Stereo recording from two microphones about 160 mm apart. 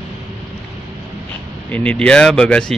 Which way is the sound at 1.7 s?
5° left (ahead or behind).